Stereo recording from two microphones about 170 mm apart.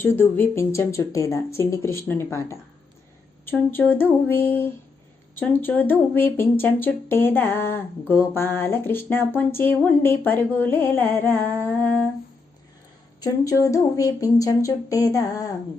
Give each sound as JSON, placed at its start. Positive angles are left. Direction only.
{"t": 0.0, "sound": "speech", "side_deg": 10}
{"t": 3.7, "sound": "speech", "side_deg": 10}
{"t": 13.2, "sound": "speech", "side_deg": 20}